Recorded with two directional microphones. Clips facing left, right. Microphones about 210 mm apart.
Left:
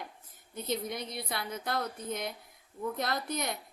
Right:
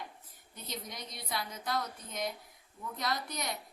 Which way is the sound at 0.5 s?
55° left (ahead or behind).